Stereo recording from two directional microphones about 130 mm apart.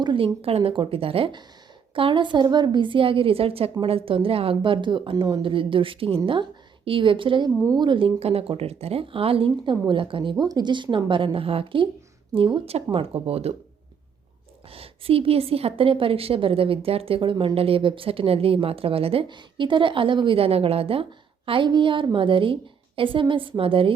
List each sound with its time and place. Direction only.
0.0 s a woman's voice: 40° right (ahead or behind)
14.7 s a woman's voice: 45° right (ahead or behind)